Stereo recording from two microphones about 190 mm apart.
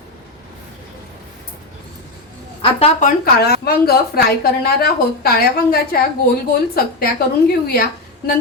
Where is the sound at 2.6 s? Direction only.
35° left (ahead or behind); by 7.1 s 50° left (ahead or behind).